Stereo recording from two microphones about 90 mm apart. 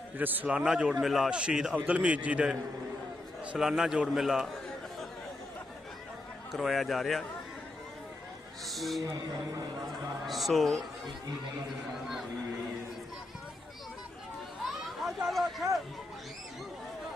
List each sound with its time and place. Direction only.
0.2 s a man's voice: 20° right (ahead or behind); by 4.5 s 5° right (ahead or behind)
6.5 s a man's voice: centre (ahead or behind)
8.6 s a man's voice: centre (ahead or behind)
9.0 s a man's voice: 40° right (ahead or behind)
10.2 s a man's voice: centre (ahead or behind)
14.6 s a sound: centre (ahead or behind)